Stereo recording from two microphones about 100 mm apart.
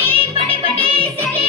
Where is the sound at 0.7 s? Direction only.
75° right (ahead or behind).